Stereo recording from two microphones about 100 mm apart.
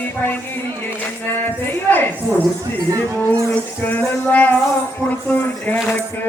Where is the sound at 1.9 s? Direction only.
20° left (ahead or behind).